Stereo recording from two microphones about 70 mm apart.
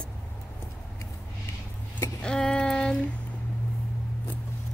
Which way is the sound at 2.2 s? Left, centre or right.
Centre.